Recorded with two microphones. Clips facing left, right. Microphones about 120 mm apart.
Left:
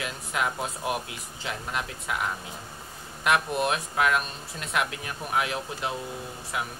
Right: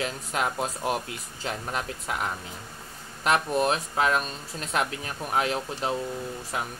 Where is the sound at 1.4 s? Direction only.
40° right (ahead or behind).